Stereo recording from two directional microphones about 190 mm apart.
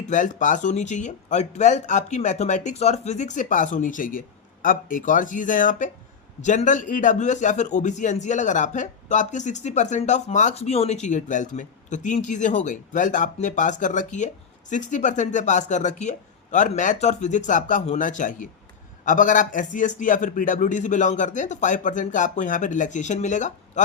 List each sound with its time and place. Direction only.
0.1 s speech: 45° left (ahead or behind)